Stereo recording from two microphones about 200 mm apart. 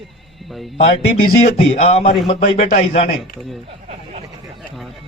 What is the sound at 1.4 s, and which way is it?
A man's voice, 35° left (ahead or behind).